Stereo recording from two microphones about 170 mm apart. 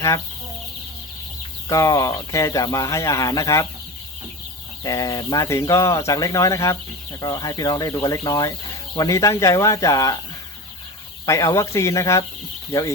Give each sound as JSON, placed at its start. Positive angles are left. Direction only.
{"t": 1.6, "sound": "speech", "side_deg": 20}
{"t": 4.8, "sound": "speech", "side_deg": 20}
{"t": 11.3, "sound": "speech", "side_deg": 15}